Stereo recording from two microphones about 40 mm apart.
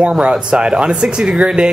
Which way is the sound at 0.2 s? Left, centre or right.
Right.